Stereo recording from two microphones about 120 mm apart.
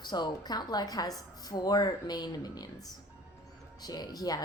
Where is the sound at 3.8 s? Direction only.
30° left (ahead or behind).